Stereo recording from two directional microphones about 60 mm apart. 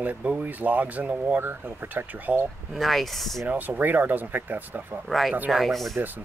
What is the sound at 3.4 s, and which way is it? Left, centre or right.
Speech, right.